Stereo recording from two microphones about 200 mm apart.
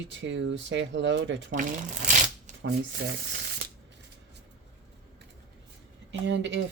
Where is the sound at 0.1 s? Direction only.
65° right (ahead or behind).